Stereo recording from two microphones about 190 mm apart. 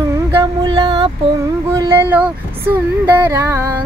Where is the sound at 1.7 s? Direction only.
15° right (ahead or behind).